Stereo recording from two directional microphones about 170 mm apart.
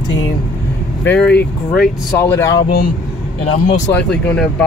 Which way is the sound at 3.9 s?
5° left (ahead or behind).